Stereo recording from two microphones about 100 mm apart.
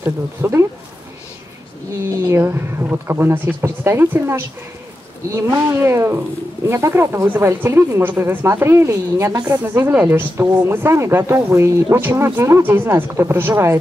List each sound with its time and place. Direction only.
0.0 s speech: 25° right (ahead or behind)
2.2 s speech: 25° right (ahead or behind)